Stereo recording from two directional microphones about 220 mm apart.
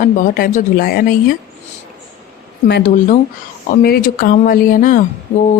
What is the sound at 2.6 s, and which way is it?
Speech, 50° left (ahead or behind).